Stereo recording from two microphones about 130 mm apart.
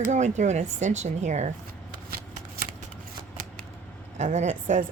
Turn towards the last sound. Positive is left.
turn(degrees=-65)  # may be behind; listen again after turning